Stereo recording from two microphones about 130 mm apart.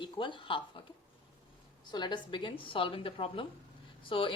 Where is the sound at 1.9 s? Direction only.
35° left (ahead or behind).